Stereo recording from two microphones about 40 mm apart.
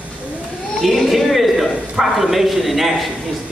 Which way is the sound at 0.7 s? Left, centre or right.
Centre.